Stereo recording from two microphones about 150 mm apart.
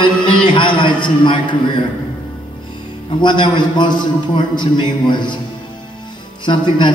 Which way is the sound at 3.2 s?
30° left (ahead or behind).